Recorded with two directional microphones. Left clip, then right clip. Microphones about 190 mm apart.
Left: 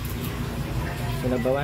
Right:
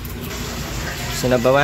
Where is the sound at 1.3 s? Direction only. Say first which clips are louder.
Right 10 dB; 35° right (ahead or behind).